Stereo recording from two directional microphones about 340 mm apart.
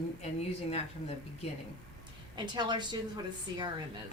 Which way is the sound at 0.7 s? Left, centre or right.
Centre.